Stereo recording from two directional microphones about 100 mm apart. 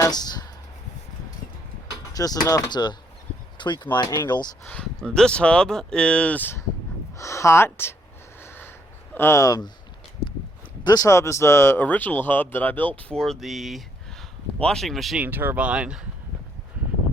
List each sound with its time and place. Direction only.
0.0 s a sound: 45° left (ahead or behind)
1.9 s speech: 40° left (ahead or behind)
4.6 s speech: 10° left (ahead or behind)
7.2 s speech: 30° left (ahead or behind)
8.4 s a sound: 20° left (ahead or behind)
9.1 s speech: 25° left (ahead or behind)
9.4 s speech: 40° left (ahead or behind)
10.8 s speech: 35° left (ahead or behind); by 15.2 s centre (ahead or behind)
15.2 s speech: 20° right (ahead or behind)